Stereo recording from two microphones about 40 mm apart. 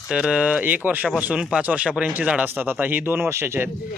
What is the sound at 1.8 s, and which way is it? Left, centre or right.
Speech, right.